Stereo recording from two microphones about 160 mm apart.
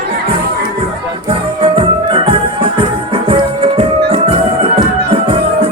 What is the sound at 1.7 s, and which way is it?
Music, 35° right (ahead or behind).